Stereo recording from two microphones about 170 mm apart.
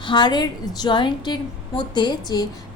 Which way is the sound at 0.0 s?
25° left (ahead or behind).